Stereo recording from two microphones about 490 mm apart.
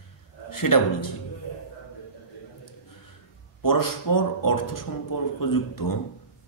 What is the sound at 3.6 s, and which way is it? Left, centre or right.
Speech, left.